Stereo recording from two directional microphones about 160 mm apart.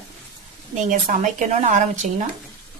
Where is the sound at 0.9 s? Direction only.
50° right (ahead or behind).